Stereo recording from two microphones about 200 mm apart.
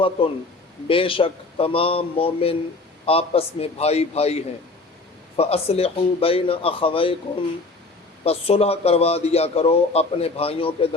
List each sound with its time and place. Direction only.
0.2 s a man's voice: 25° left (ahead or behind)
8.2 s a man's voice: 30° left (ahead or behind)